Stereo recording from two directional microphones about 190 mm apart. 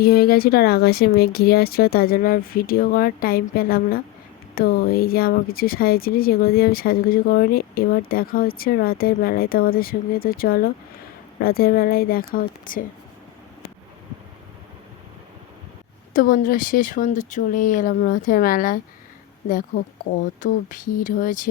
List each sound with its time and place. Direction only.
0.0 s a woman's voice: 55° left (ahead or behind)
16.1 s a woman's voice: 45° left (ahead or behind)